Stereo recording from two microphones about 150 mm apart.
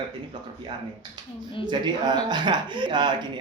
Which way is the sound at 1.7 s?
30° right (ahead or behind).